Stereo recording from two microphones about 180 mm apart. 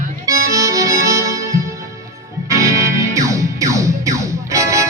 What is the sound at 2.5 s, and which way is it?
Music, 15° right (ahead or behind).